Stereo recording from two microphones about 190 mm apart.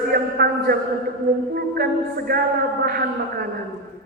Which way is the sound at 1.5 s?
55° right (ahead or behind).